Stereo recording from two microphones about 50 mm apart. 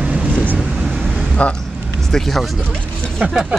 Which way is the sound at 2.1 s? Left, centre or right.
Centre.